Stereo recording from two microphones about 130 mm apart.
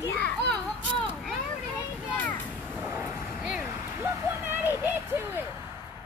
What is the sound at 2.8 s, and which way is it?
Vehicle, 20° right (ahead or behind).